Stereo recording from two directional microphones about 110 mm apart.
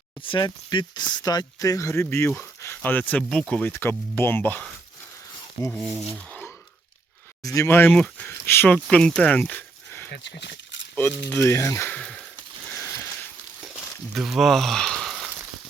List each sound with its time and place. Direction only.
0.2 s speech: 50° left (ahead or behind); by 4.7 s 15° left (ahead or behind)
6.0 s speech: centre (ahead or behind)
7.4 s speech: 25° left (ahead or behind)
7.9 s speech: 10° left (ahead or behind)
8.3 s speech: 20° left (ahead or behind)
11.9 s speech: 5° left (ahead or behind)
12.8 s a sound: 20° left (ahead or behind)
14.1 s speech: centre (ahead or behind)